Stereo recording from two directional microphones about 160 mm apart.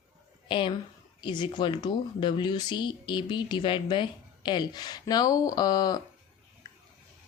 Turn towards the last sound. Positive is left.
turn(degrees=25)  # may be behind; listen again after turning